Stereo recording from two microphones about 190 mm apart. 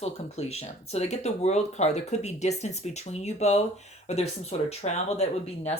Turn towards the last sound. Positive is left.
turn(degrees=35)  # may be behind; listen again after turning